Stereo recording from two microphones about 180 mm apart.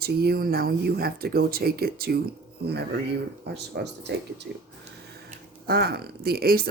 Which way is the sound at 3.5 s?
70° right (ahead or behind).